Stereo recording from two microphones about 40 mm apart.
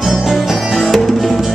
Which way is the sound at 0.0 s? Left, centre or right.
Centre.